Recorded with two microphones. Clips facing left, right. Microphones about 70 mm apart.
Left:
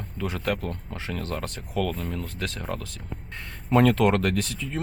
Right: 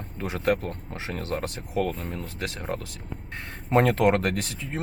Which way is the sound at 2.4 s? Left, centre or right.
Centre.